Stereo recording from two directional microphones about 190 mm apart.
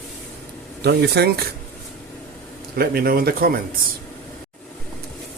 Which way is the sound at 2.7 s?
55° right (ahead or behind).